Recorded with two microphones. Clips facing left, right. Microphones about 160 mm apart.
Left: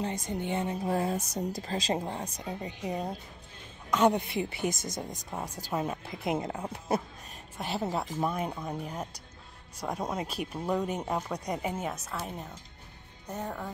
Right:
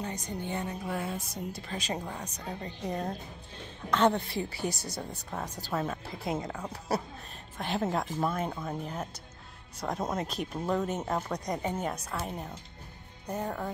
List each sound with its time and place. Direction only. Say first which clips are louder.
0.0 s speech: left 3 dB; 25° left (ahead or behind)
0.8 s a woman's voice: left 5 dB; 35° left (ahead or behind)
2.6 s a woman's voice: even; 10° left (ahead or behind); by 7.0 s 25° left (ahead or behind)
7.5 s a woman's voice: right 1 dB; 5° left (ahead or behind)